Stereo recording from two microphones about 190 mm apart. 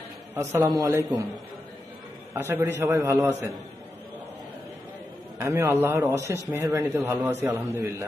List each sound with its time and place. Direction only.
0.3 s a man's voice: 15° right (ahead or behind)
2.3 s a man's voice: 10° right (ahead or behind)
5.4 s a man's voice: 15° right (ahead or behind)